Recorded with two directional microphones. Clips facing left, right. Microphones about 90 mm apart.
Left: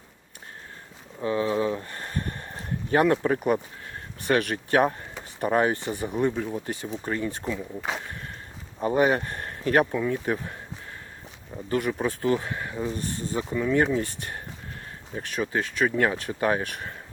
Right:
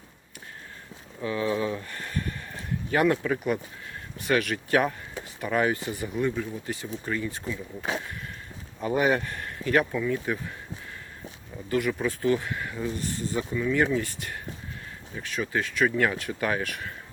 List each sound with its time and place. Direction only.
1.2 s a sound: 30° left (ahead or behind)
4.3 s speech: 35° left (ahead or behind)
8.9 s speech: 35° left (ahead or behind)
11.5 s speech: 30° left (ahead or behind)
13.5 s speech: 40° left (ahead or behind)